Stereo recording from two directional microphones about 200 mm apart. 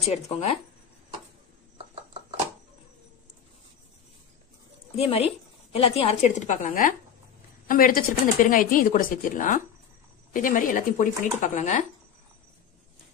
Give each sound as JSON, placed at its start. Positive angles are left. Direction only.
{"t": 0.0, "sound": "speech", "side_deg": 30}
{"t": 4.9, "sound": "a woman's voice", "side_deg": 30}